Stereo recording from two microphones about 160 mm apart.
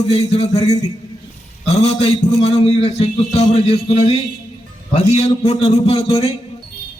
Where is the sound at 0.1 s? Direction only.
40° left (ahead or behind).